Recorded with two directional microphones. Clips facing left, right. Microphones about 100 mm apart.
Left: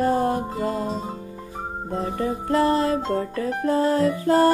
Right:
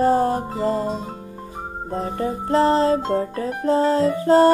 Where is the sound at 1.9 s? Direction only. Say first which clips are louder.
Right 1 dB; 35° right (ahead or behind).